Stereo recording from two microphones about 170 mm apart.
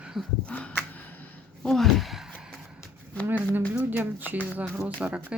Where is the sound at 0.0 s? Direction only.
5° right (ahead or behind).